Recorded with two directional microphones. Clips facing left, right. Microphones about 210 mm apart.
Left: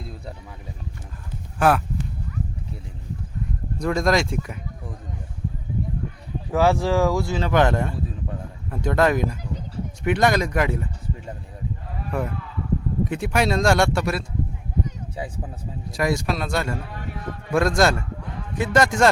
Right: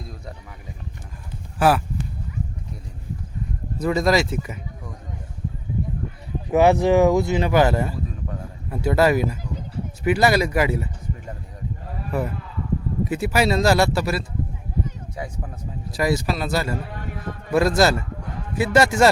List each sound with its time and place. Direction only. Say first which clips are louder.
1.5 s speech: right 1 dB; 5° right (ahead or behind)
3.8 s speech: right 1 dB; 5° right (ahead or behind)
6.5 s speech: right 4 dB; 20° right (ahead or behind)
7.5 s speech: even; 5° right (ahead or behind)
12.1 s speech: right 1 dB; 5° right (ahead or behind)
15.9 s speech: right 1 dB; centre (ahead or behind)